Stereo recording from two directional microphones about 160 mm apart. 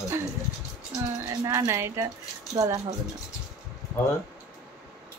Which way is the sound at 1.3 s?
20° right (ahead or behind).